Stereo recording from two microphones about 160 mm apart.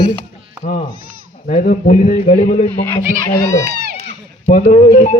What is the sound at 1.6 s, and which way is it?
Speech, 55° left (ahead or behind).